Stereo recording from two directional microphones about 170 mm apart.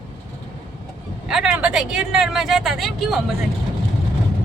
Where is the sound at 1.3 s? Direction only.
5° right (ahead or behind).